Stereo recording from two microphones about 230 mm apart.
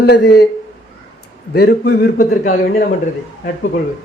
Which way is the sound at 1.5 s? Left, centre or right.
Left.